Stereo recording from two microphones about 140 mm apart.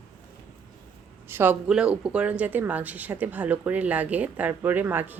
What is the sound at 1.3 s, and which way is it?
Speech, 15° right (ahead or behind).